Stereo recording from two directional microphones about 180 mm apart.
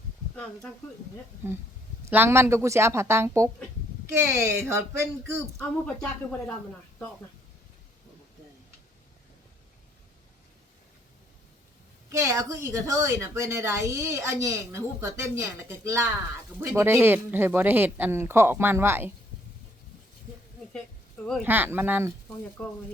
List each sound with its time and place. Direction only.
2.0 s a woman's voice: 10° right (ahead or behind)
5.5 s speech: 5° left (ahead or behind)
12.0 s a woman's voice: 15° right (ahead or behind)
21.4 s a woman's voice: 10° right (ahead or behind)
22.6 s speech: 5° left (ahead or behind)